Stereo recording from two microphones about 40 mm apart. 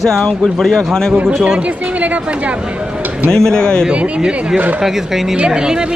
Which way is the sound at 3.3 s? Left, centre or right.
Centre.